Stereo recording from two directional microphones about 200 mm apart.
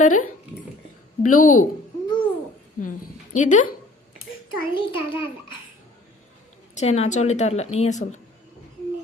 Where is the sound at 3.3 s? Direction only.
40° left (ahead or behind).